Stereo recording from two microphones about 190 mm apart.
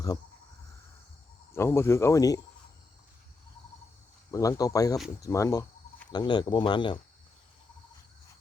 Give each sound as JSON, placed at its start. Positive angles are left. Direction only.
{"t": 1.5, "sound": "speech", "side_deg": 15}
{"t": 4.3, "sound": "speech", "side_deg": 20}